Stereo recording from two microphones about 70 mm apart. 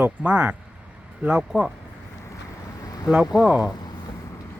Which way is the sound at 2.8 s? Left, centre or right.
Left.